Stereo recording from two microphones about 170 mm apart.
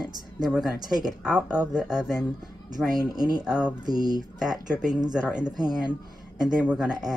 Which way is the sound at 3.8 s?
25° right (ahead or behind).